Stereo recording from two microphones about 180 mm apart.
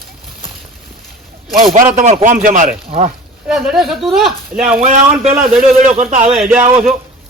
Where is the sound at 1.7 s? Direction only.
40° right (ahead or behind).